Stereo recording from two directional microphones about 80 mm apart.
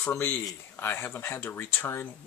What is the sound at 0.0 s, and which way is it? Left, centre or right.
Speech, left.